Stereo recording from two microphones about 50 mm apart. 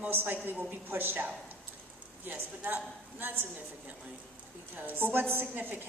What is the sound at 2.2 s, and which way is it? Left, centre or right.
A man's voice, right.